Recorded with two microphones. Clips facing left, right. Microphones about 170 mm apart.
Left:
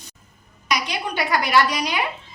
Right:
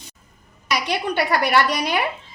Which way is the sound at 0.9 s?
60° right (ahead or behind).